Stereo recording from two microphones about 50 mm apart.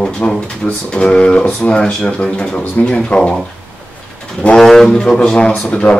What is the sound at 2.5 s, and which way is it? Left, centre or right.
Speech, left.